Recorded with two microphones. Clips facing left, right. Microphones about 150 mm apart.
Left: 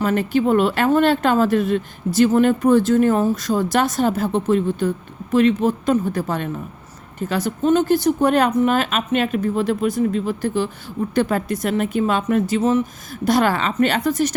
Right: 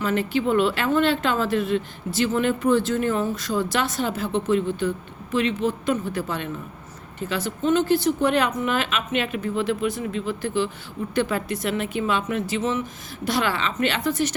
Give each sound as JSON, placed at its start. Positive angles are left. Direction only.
{"t": 0.0, "sound": "speech", "side_deg": 45}